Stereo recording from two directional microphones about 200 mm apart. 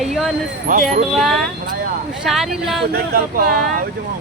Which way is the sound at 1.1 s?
Centre (ahead or behind).